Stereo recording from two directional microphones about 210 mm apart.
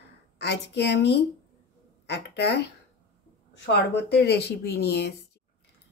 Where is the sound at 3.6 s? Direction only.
55° left (ahead or behind).